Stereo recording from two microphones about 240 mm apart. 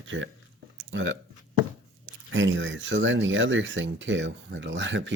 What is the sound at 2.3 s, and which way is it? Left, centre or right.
Speech, right.